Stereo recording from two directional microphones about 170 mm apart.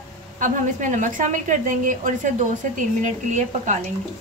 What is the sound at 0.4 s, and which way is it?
A woman's voice, 50° right (ahead or behind).